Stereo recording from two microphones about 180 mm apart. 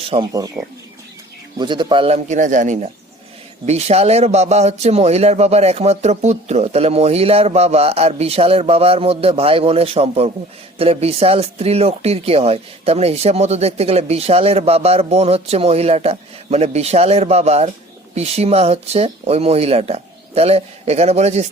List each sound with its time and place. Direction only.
0.0 s speech: 30° right (ahead or behind)
0.3 s speech: 20° right (ahead or behind); by 21.4 s 35° right (ahead or behind)